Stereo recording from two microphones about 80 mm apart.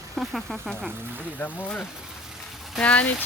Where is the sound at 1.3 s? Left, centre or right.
Left.